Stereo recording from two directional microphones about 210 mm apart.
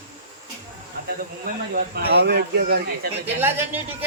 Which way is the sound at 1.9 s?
50° right (ahead or behind).